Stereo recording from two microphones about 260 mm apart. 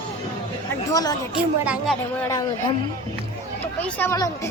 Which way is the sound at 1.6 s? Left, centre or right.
Centre.